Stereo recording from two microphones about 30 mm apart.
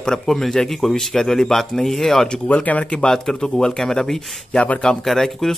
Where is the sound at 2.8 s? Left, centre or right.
Left.